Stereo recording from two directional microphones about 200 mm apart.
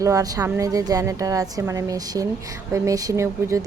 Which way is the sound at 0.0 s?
15° right (ahead or behind).